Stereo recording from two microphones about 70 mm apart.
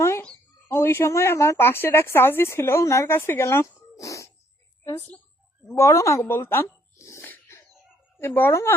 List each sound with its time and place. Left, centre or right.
0.7 s speech: left
3.9 s cough: left
5.6 s a woman's voice: left
6.2 s speech: left
7.0 s sneeze: left
8.2 s speech: left